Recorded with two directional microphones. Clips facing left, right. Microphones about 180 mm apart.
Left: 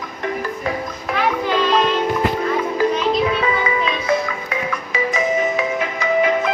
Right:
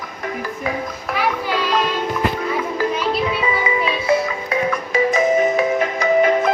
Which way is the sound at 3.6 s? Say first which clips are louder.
Right 1 dB; 25° right (ahead or behind).